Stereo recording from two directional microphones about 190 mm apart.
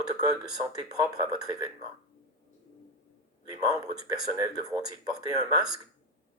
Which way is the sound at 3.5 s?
20° right (ahead or behind).